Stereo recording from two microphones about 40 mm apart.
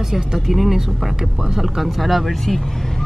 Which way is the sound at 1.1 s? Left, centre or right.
Centre.